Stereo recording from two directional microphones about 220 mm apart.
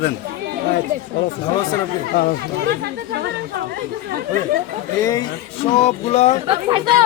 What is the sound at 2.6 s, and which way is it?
Speech, 50° right (ahead or behind).